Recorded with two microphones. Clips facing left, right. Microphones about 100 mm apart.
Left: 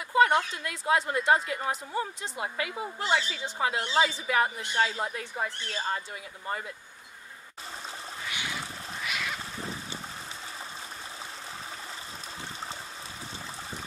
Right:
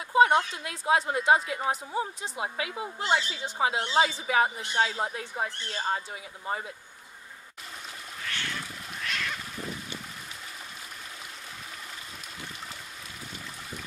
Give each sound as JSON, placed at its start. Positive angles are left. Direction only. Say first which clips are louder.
{"t": 0.1, "sound": "a woman's voice", "louder": "right 2 dB", "side_deg": -20}
{"t": 5.3, "sound": "a woman's voice", "louder": "even", "side_deg": -15}
{"t": 8.3, "sound": "cat", "louder": "right 1 dB", "side_deg": 10}
{"t": 9.6, "sound": "a sound", "louder": "even", "side_deg": 30}